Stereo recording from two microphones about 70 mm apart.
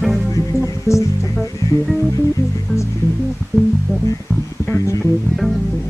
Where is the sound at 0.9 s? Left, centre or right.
Left.